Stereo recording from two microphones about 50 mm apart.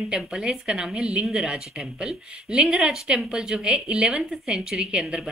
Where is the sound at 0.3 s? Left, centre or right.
Centre.